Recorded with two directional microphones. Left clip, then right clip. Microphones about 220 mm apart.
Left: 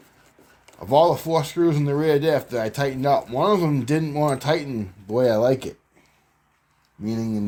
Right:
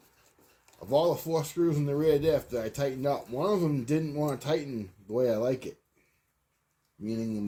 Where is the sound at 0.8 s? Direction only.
40° left (ahead or behind).